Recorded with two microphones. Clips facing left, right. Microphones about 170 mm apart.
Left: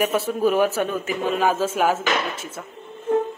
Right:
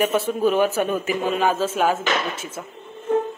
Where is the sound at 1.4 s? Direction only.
10° left (ahead or behind).